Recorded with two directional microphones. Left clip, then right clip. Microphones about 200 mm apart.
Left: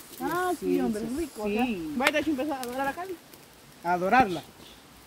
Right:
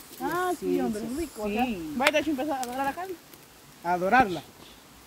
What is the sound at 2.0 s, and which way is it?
Speech, 50° right (ahead or behind).